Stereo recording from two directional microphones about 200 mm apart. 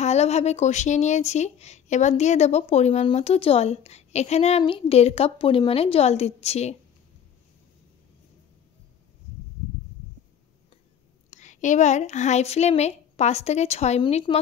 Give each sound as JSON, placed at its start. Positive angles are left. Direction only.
{"t": 0.0, "sound": "speech", "side_deg": 30}
{"t": 11.2, "sound": "speech", "side_deg": 35}